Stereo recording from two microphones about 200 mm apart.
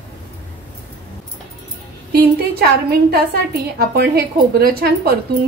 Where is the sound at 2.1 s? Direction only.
50° right (ahead or behind).